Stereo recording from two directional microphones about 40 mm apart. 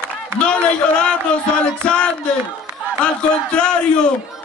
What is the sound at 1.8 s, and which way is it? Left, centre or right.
Speech, left.